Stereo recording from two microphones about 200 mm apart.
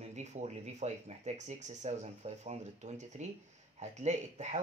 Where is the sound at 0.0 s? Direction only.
35° right (ahead or behind).